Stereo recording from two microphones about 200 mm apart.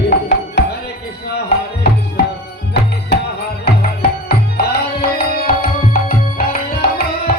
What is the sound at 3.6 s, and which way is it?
Tabla, 50° left (ahead or behind).